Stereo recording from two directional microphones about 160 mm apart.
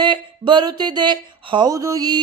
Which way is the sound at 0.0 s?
30° right (ahead or behind).